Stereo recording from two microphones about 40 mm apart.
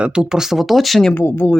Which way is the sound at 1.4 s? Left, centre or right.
Left.